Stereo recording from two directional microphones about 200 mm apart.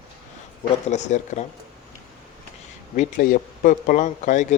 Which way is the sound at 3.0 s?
40° left (ahead or behind).